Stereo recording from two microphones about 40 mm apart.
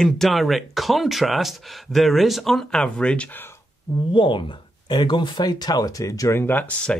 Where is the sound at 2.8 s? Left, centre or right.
Left.